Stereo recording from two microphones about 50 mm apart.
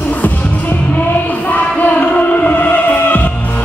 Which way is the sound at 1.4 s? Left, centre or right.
Left.